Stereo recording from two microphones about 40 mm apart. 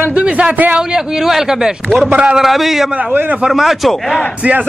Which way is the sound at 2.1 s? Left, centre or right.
Right.